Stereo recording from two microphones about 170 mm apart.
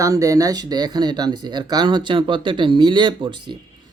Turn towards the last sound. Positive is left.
turn(degrees=-30)  # may be behind; listen again after turning